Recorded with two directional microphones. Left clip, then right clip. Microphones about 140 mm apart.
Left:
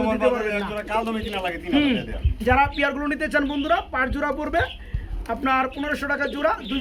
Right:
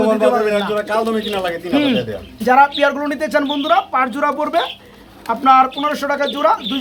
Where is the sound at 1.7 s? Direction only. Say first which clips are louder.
Right 5 dB; 5° right (ahead or behind).